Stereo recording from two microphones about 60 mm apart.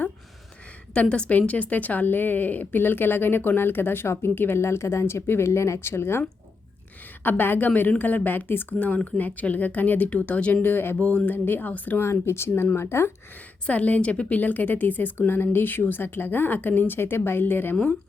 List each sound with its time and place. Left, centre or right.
1.1 s a woman's voice: centre; by 6.2 s left
7.3 s a woman's voice: left
12.2 s speech: left
13.7 s a woman's voice: left